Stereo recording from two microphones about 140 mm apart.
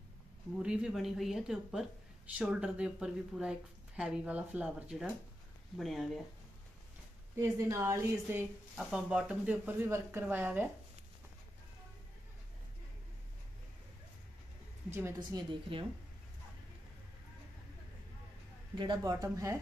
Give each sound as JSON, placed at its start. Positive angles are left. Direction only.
{"t": 0.6, "sound": "a woman's voice", "side_deg": -5}
{"t": 7.3, "sound": "speech", "side_deg": -20}
{"t": 8.7, "sound": "a woman's voice", "side_deg": -5}
{"t": 14.9, "sound": "a woman's voice", "side_deg": -15}
{"t": 15.1, "sound": "a woman's voice", "side_deg": -30}
{"t": 18.8, "sound": "speech", "side_deg": -30}